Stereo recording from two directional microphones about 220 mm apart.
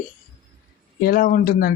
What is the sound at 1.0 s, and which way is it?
Speech, 40° left (ahead or behind).